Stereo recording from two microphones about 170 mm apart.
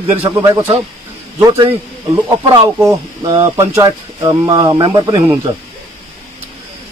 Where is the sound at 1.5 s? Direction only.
35° right (ahead or behind).